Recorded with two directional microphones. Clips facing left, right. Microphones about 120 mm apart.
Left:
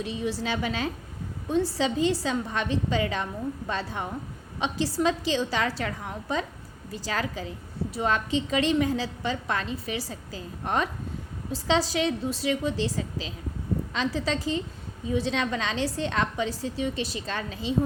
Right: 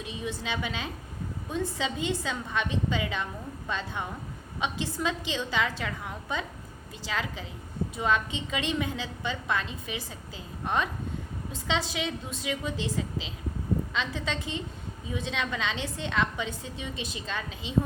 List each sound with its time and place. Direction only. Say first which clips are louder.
0.0 s a woman's voice: left 5 dB; 35° left (ahead or behind)